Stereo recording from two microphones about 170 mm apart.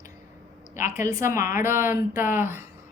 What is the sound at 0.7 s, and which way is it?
Speech, 50° left (ahead or behind).